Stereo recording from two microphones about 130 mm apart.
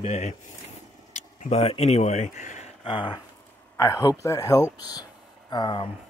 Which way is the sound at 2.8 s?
40° left (ahead or behind).